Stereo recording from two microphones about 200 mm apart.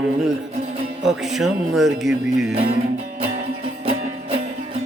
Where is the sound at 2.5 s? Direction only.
30° right (ahead or behind).